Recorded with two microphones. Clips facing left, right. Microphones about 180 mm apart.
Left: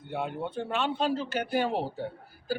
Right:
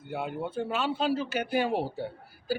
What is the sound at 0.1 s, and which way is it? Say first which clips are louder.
A man's voice: even; 5° right (ahead or behind).